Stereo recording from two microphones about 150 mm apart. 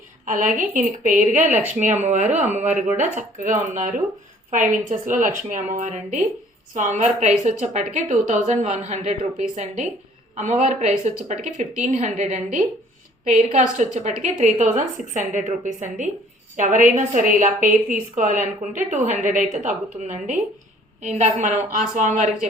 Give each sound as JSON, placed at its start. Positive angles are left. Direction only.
{"t": 0.3, "sound": "a woman's voice", "side_deg": -60}